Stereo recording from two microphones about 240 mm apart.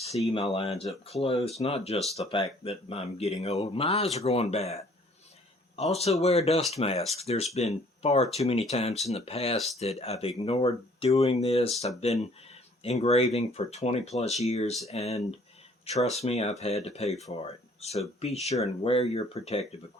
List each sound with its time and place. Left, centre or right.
0.0 s speech: left